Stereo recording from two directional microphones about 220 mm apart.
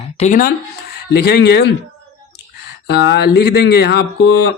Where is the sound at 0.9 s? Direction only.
45° left (ahead or behind).